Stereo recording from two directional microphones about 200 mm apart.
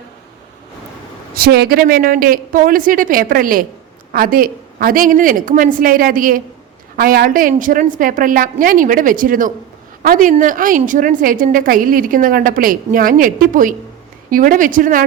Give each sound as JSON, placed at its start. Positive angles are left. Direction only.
{"t": 1.4, "sound": "a woman's voice", "side_deg": -50}